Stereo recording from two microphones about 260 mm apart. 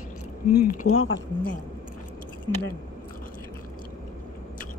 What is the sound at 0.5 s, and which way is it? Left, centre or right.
Speech, left.